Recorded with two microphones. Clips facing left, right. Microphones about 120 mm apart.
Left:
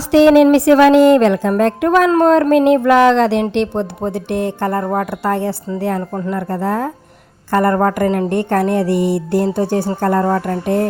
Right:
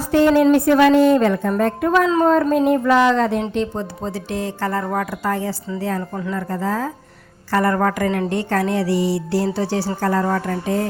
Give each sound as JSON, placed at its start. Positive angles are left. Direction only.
{"t": 0.0, "sound": "a woman's voice", "side_deg": 85}
{"t": 4.8, "sound": "a woman's voice", "side_deg": 35}
{"t": 5.1, "sound": "speech", "side_deg": 65}
{"t": 7.5, "sound": "a woman's voice", "side_deg": 40}
{"t": 8.3, "sound": "speech", "side_deg": 55}
{"t": 10.5, "sound": "a woman's voice", "side_deg": 40}